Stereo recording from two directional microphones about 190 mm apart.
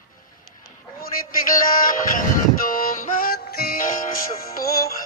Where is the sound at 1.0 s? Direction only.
50° left (ahead or behind).